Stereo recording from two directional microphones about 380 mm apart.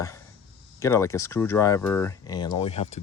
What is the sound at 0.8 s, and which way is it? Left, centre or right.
Speech, centre.